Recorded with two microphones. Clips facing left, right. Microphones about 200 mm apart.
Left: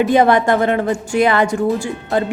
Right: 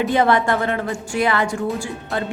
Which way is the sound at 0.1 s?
15° left (ahead or behind).